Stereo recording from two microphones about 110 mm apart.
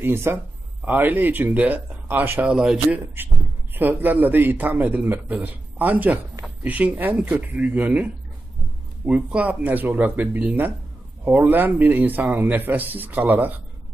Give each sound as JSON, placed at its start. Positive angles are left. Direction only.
{"t": 0.0, "sound": "a man's voice", "side_deg": -20}